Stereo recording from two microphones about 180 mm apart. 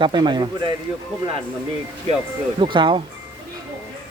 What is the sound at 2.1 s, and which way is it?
Speech, 35° right (ahead or behind).